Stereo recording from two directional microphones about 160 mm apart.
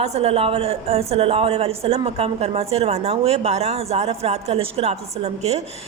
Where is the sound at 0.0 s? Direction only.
40° right (ahead or behind).